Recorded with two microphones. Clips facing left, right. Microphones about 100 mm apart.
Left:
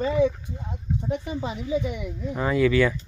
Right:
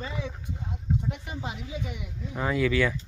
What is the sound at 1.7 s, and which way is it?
Speech, 50° left (ahead or behind).